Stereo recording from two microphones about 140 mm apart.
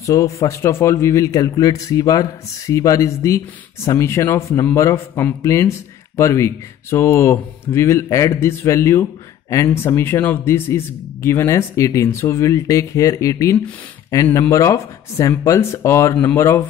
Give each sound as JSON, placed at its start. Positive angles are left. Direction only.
{"t": 0.0, "sound": "a man's voice", "side_deg": 20}